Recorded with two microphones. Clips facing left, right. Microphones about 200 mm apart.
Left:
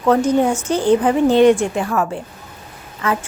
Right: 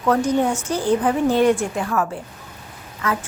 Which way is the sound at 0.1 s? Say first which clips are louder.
Left 4 dB; 25° left (ahead or behind).